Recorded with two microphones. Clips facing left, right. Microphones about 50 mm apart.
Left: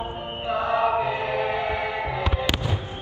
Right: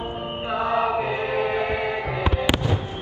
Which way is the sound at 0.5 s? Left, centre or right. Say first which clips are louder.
Even; right.